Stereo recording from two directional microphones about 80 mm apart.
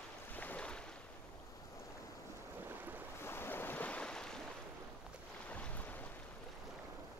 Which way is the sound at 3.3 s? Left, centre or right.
Left.